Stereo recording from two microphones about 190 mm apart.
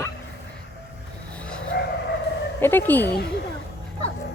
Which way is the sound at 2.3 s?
60° left (ahead or behind).